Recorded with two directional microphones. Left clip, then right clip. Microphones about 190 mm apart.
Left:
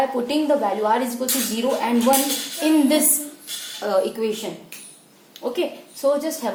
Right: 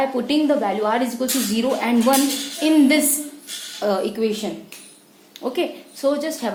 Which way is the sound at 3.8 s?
35° right (ahead or behind).